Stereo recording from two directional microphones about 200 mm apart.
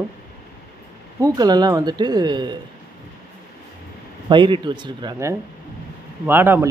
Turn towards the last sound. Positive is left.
turn(degrees=-10)  # may be behind; listen again after turning